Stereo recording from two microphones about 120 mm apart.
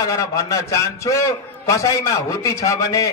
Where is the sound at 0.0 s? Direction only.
25° left (ahead or behind).